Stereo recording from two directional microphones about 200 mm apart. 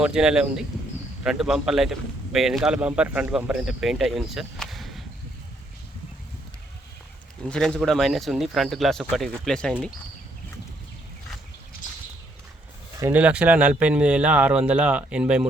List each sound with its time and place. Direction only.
0.0 s a man's voice: 5° right (ahead or behind)
7.5 s a man's voice: 5° left (ahead or behind)
13.0 s speech: 10° right (ahead or behind)